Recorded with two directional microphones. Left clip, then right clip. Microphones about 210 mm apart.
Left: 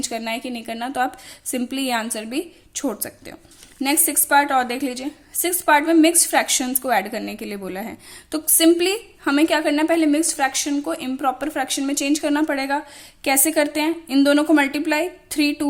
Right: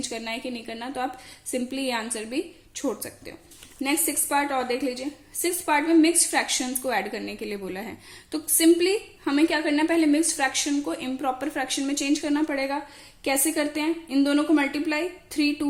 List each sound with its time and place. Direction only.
0.0 s a woman's voice: 40° left (ahead or behind)